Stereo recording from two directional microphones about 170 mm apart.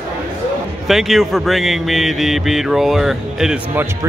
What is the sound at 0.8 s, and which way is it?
Speech, centre (ahead or behind).